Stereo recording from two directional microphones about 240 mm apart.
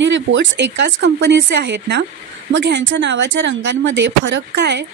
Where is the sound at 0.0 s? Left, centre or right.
Right.